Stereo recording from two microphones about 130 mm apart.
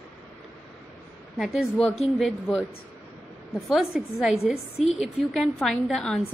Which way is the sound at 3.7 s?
Centre (ahead or behind).